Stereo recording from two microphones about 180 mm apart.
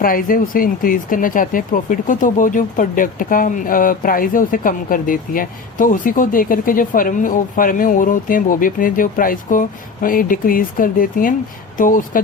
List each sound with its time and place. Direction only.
0.0 s speech: 50° left (ahead or behind)